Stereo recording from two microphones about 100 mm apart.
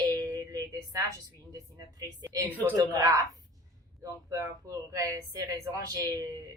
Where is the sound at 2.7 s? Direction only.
35° right (ahead or behind).